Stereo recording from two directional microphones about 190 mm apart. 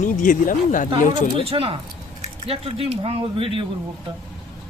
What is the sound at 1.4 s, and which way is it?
Speech, 30° right (ahead or behind).